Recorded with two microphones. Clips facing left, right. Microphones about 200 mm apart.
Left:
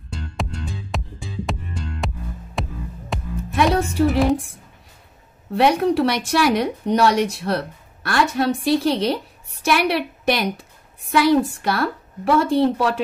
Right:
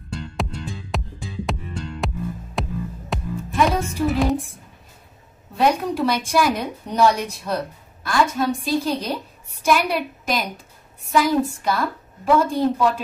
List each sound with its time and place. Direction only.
0.1 s music: centre (ahead or behind)
3.5 s music: 70° left (ahead or behind)
4.2 s a woman's voice: centre (ahead or behind)
5.5 s a woman's voice: 70° left (ahead or behind)